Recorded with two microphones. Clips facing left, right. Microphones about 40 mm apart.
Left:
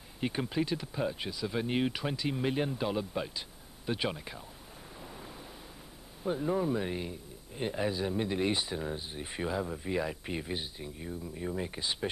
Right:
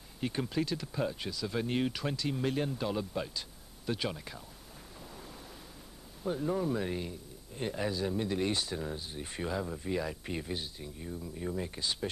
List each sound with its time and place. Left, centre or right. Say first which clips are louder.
0.2 s a man's voice: left 1 dB; centre
5.0 s a sound: left 2 dB; centre
6.2 s a man's voice: left 2 dB; centre